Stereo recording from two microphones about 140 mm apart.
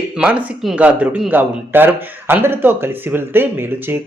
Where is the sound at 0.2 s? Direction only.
10° right (ahead or behind).